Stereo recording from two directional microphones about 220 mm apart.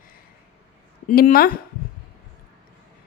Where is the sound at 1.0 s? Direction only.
40° left (ahead or behind).